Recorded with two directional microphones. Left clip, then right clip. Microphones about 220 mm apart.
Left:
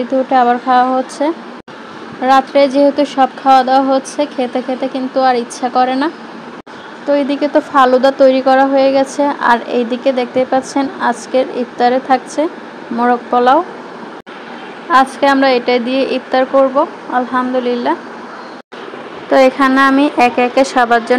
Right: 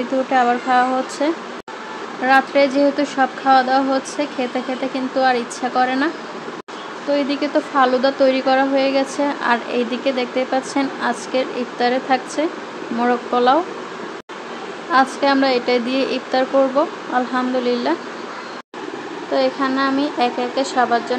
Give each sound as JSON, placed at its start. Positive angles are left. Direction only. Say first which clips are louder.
{"t": 0.3, "sound": "a woman's voice", "louder": "left 5 dB", "side_deg": 15}
{"t": 14.9, "sound": "a woman's voice", "louder": "left 6 dB", "side_deg": 15}
{"t": 19.3, "sound": "speech", "louder": "left 9 dB", "side_deg": 35}